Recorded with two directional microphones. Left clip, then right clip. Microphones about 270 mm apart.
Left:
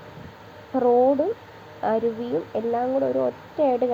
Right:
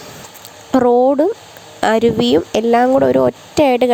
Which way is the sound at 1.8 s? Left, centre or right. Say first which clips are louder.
Right 10 dB; right.